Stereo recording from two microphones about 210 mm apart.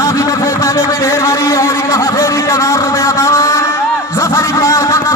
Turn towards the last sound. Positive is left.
turn(degrees=15)  # may be behind; listen again after turning